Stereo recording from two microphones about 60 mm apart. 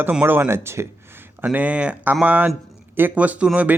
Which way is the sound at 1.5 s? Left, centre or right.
Right.